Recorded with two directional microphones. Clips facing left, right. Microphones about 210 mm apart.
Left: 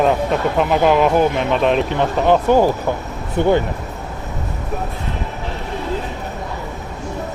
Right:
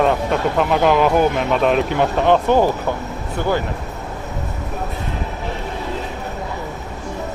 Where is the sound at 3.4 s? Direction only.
20° left (ahead or behind).